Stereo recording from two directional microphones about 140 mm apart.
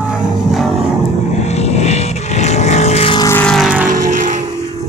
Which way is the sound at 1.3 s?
50° left (ahead or behind).